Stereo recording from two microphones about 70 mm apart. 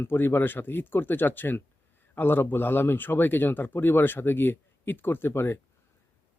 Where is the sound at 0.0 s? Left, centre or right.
Left.